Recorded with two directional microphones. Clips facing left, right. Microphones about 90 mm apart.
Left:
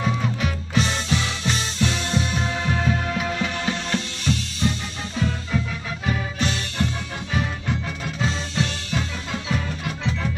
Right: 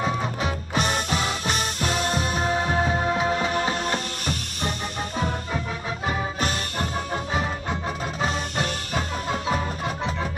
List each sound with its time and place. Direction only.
0.0 s music: 35° right (ahead or behind)
0.7 s music: 50° right (ahead or behind)
8.2 s music: 45° right (ahead or behind)